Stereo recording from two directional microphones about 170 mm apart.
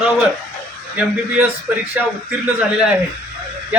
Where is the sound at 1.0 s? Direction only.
5° right (ahead or behind).